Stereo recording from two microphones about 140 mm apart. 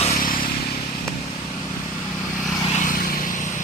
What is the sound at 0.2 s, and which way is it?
Vehicle, 90° left.